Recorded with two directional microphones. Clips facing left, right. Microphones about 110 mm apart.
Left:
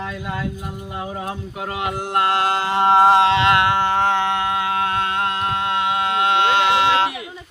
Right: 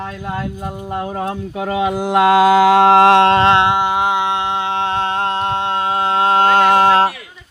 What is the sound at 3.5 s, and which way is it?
Humming, 20° right (ahead or behind).